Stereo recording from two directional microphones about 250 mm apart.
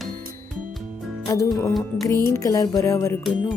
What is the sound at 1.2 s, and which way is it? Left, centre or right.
A woman's voice, centre.